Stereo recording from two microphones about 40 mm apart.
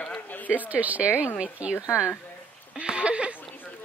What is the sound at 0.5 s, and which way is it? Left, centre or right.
A woman's voice, right.